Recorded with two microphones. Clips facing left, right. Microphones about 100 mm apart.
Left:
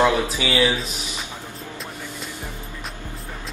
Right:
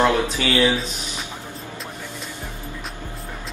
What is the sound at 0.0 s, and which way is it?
Speech, 15° left (ahead or behind).